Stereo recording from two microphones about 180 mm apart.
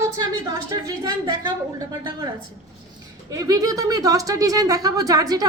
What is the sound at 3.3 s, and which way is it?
A woman's voice, 20° right (ahead or behind).